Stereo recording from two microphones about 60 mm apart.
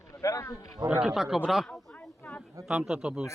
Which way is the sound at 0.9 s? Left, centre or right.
Centre.